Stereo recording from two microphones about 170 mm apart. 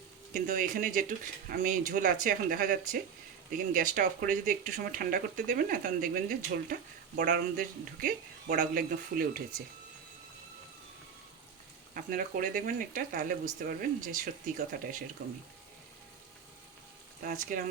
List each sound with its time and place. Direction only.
0.3 s speech: 55° right (ahead or behind)
11.9 s speech: 55° right (ahead or behind)
17.2 s speech: 50° right (ahead or behind)